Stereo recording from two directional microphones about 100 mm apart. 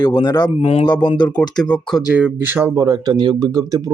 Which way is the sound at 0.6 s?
70° left (ahead or behind).